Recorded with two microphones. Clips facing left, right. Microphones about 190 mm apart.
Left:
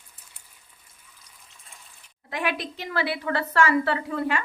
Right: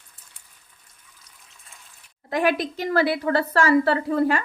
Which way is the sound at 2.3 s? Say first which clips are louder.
Right 7 dB; 40° right (ahead or behind).